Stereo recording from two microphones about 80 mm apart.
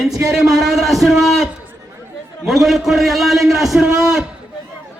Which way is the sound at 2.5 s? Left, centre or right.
Centre.